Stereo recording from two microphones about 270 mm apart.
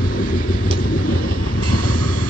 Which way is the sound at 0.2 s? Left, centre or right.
Left.